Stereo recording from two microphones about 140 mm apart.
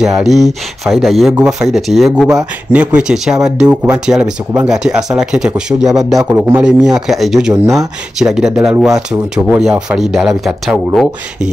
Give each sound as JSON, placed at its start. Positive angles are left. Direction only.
{"t": 0.0, "sound": "speech", "side_deg": -5}
{"t": 6.1, "sound": "speech", "side_deg": -15}
{"t": 6.6, "sound": "speech", "side_deg": -5}